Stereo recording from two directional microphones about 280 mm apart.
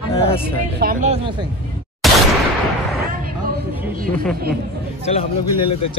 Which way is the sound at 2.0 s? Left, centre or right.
Centre.